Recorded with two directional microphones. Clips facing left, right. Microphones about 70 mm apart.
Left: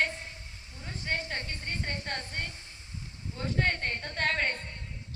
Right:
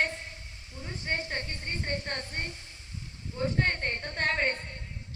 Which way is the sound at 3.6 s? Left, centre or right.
Right.